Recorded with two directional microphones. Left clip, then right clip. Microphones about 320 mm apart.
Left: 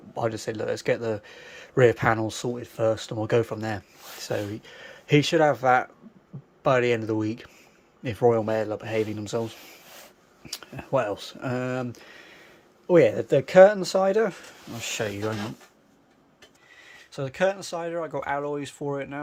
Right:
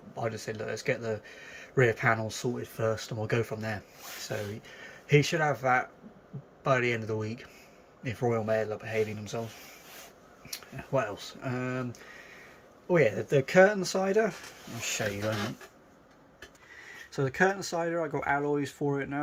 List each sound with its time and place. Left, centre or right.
0.2 s speech: centre
10.5 s speech: centre
17.1 s speech: centre